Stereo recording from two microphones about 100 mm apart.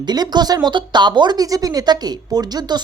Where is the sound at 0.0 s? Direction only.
45° right (ahead or behind).